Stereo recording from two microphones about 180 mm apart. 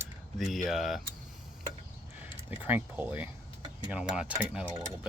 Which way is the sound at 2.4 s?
10° right (ahead or behind).